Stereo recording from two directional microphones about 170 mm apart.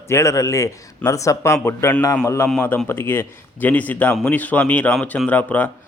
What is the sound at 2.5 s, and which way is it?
A man's voice, 5° left (ahead or behind).